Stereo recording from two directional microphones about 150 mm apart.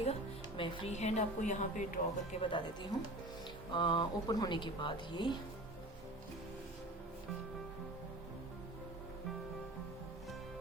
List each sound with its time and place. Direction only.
0.0 s music: 40° left (ahead or behind)
0.9 s a woman's voice: 50° left (ahead or behind)
2.4 s a woman's voice: 30° left (ahead or behind)